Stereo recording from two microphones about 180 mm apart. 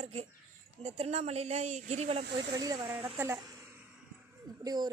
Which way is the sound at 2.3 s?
20° right (ahead or behind).